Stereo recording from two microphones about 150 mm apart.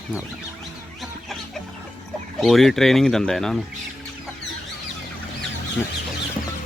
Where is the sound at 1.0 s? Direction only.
Centre (ahead or behind).